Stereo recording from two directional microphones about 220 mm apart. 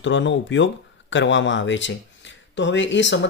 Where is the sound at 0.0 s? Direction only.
55° left (ahead or behind).